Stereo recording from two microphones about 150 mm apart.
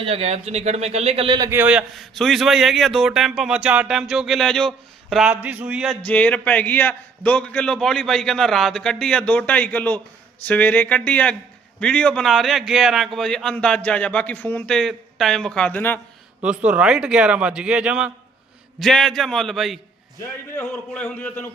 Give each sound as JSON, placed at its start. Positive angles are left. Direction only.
{"t": 0.0, "sound": "speech", "side_deg": -40}
{"t": 1.5, "sound": "a man's voice", "side_deg": -10}
{"t": 5.3, "sound": "a man's voice", "side_deg": -10}
{"t": 6.1, "sound": "a man's voice", "side_deg": 10}
{"t": 16.4, "sound": "a man's voice", "side_deg": -10}
{"t": 20.9, "sound": "a man's voice", "side_deg": 10}